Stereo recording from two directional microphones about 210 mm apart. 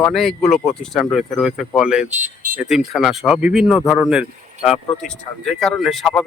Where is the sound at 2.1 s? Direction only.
40° right (ahead or behind).